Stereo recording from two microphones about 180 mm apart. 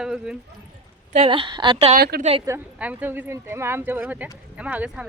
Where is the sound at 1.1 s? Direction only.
30° right (ahead or behind).